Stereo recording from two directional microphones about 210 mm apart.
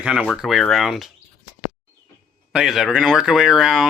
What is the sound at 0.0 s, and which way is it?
Speech, 5° right (ahead or behind).